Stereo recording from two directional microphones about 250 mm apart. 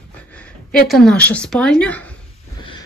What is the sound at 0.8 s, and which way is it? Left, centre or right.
A woman's voice, centre.